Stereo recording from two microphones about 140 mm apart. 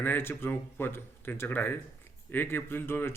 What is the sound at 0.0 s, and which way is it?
A man's voice, 15° left (ahead or behind).